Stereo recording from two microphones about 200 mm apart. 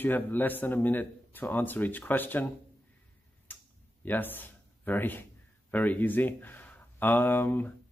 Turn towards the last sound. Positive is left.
turn(degrees=10)  # may be behind; listen again after turning